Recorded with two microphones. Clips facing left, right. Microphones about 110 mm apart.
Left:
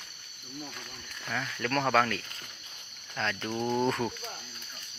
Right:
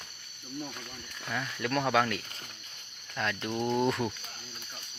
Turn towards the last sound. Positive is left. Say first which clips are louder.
# even
turn(degrees=0)  # may be behind; listen again after turning